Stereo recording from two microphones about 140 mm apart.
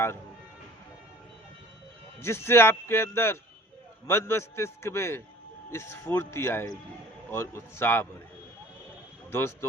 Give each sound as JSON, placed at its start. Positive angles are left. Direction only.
{"t": 2.2, "sound": "a man's voice", "side_deg": 20}
{"t": 9.3, "sound": "a man's voice", "side_deg": 15}